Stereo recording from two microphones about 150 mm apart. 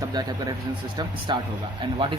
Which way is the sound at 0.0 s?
25° right (ahead or behind).